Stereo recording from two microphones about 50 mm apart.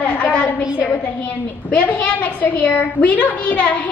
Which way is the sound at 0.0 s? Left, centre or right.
Left.